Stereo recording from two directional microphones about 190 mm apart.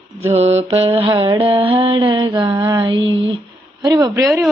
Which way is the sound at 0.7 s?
30° right (ahead or behind).